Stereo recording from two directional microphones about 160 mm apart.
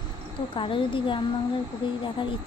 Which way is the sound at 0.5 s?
30° left (ahead or behind).